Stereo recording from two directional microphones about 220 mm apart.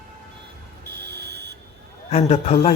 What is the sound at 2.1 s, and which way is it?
Speech, 30° left (ahead or behind).